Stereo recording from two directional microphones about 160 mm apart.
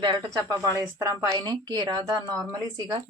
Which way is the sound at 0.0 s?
25° right (ahead or behind).